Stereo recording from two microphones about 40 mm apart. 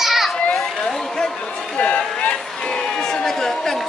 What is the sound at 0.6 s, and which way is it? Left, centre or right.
Speech, centre.